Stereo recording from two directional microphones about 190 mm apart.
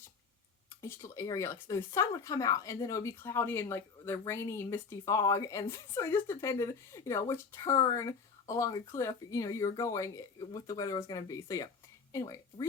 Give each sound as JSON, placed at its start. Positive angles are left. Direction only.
{"t": 0.8, "sound": "speech", "side_deg": 15}